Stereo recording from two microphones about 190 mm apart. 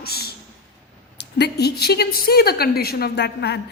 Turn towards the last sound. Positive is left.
turn(degrees=60)  # may be behind; listen again after turning